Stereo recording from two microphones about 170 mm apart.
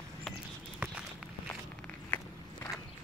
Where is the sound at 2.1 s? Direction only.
10° left (ahead or behind).